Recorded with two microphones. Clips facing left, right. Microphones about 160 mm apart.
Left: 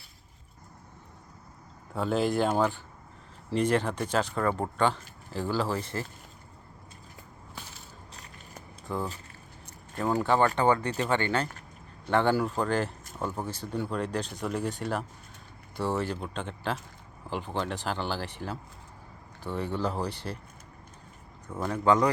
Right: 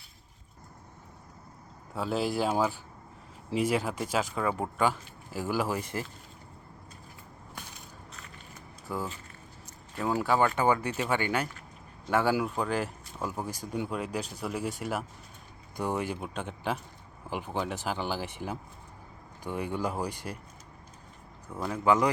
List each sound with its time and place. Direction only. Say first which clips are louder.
2.0 s speech: left 3 dB; centre (ahead or behind)
8.9 s speech: left 2 dB; 10° right (ahead or behind)
21.5 s speech: left 1 dB; 5° right (ahead or behind)